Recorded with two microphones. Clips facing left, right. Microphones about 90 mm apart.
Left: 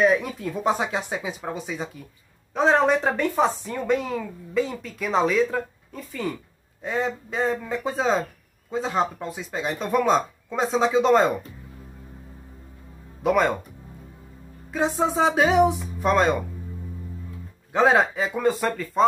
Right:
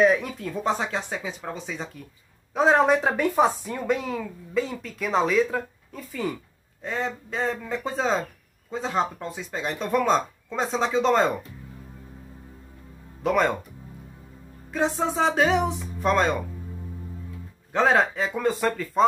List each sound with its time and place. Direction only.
0.0 s speech: 5° left (ahead or behind)
2.5 s speech: 5° right (ahead or behind)
13.2 s speech: 5° left (ahead or behind)
14.7 s speech: 5° left (ahead or behind)
17.7 s speech: 5° left (ahead or behind)